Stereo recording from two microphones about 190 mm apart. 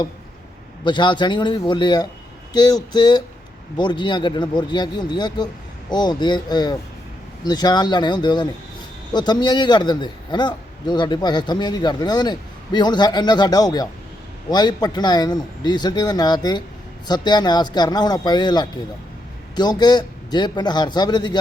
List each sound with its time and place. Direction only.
0.9 s a man's voice: 25° left (ahead or behind)